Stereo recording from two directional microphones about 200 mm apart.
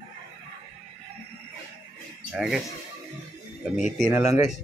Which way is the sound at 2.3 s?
Centre (ahead or behind).